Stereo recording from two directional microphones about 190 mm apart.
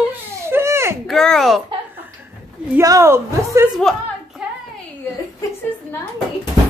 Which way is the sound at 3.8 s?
Centre (ahead or behind).